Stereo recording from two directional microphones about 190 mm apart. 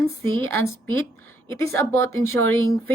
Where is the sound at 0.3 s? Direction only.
15° left (ahead or behind).